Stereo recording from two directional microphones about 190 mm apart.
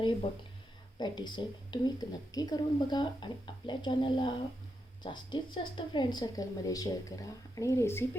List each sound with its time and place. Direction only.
0.9 s speech: 20° left (ahead or behind)